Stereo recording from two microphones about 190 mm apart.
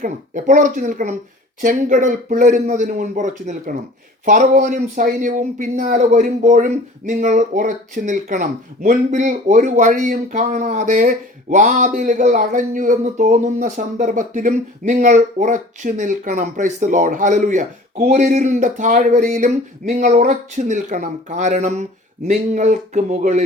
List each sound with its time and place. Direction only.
0.0 s speech: 40° right (ahead or behind)